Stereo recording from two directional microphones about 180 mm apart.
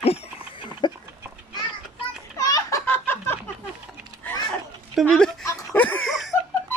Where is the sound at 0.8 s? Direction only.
25° left (ahead or behind).